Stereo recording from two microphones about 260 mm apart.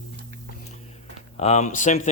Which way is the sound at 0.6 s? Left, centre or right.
Left.